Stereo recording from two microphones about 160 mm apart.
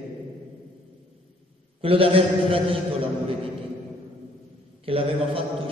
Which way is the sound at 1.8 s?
35° right (ahead or behind).